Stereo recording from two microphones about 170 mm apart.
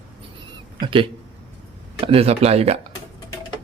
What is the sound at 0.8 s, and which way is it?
Speech, 30° right (ahead or behind).